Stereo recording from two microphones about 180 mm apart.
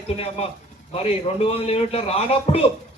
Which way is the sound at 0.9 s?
35° left (ahead or behind).